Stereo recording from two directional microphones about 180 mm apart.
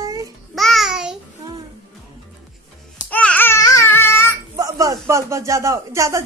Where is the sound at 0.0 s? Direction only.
20° right (ahead or behind).